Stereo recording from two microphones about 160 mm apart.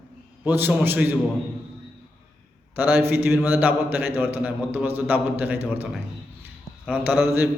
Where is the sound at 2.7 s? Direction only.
10° right (ahead or behind).